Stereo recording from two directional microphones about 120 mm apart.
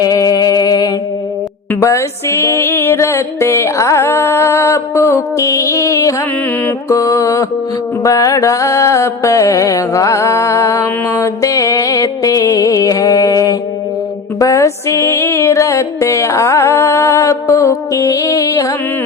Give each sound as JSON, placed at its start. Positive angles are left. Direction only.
{"t": 0.0, "sound": "music", "side_deg": 30}